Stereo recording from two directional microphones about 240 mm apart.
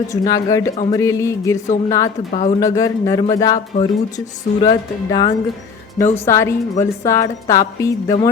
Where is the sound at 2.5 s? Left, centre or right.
Centre.